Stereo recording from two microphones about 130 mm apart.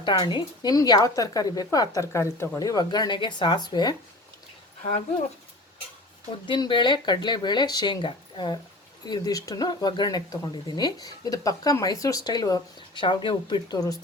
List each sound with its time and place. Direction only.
0.0 s a woman's voice: 35° left (ahead or behind)
6.4 s a woman's voice: 35° left (ahead or behind)